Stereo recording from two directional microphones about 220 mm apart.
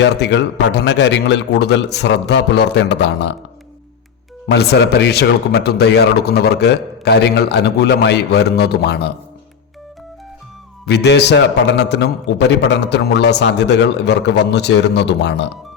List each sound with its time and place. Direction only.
0.0 s a man's voice: 50° left (ahead or behind)
4.5 s a man's voice: 50° left (ahead or behind)
10.8 s a man's voice: 50° left (ahead or behind)